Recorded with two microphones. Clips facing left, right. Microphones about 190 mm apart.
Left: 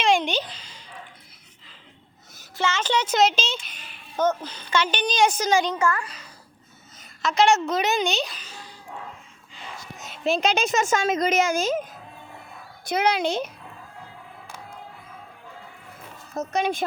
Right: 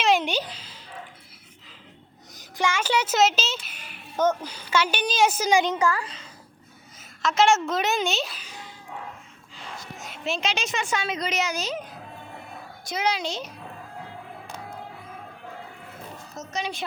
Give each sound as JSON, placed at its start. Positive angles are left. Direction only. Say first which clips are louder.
{"t": 0.0, "sound": "a sound", "louder": "left 1 dB", "side_deg": -5}
{"t": 2.3, "sound": "speech", "louder": "even", "side_deg": -15}
{"t": 7.2, "sound": "a woman's voice", "louder": "left 1 dB", "side_deg": 0}
{"t": 10.5, "sound": "a woman's voice", "louder": "left 6 dB", "side_deg": 50}
{"t": 12.8, "sound": "speech", "louder": "left 5 dB", "side_deg": 60}
{"t": 16.3, "sound": "speech", "louder": "left 8 dB", "side_deg": 55}